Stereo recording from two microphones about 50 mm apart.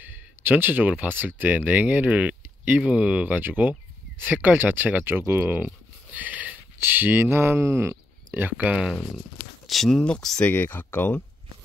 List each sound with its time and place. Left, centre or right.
0.0 s a sound: right
1.0 s speech: right
3.3 s speech: right
6.1 s a sound: right
6.8 s speech: right
8.4 s speech: right
8.7 s speech: centre
9.7 s speech: centre
9.9 s speech: centre
10.4 s speech: left